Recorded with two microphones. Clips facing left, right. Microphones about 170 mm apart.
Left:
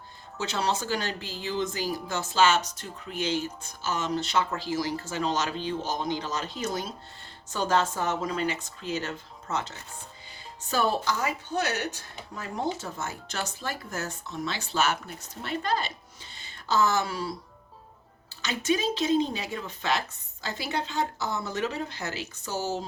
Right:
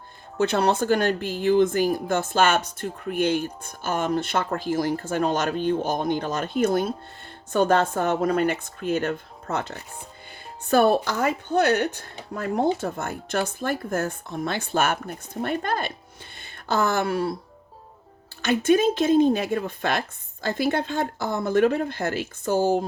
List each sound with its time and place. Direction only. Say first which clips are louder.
0.3 s speech: right 8 dB; 55° right (ahead or behind)
18.4 s speech: right 8 dB; 55° right (ahead or behind)